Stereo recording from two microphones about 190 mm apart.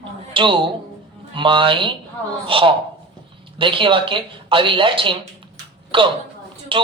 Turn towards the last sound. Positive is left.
turn(degrees=-25)  # may be behind; listen again after turning